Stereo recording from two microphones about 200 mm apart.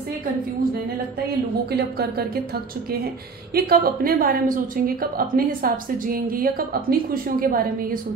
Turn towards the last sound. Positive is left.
turn(degrees=-45)  # may be behind; listen again after turning